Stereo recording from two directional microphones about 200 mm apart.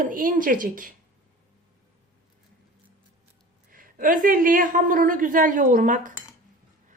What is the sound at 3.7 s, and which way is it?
A woman's voice, 45° right (ahead or behind).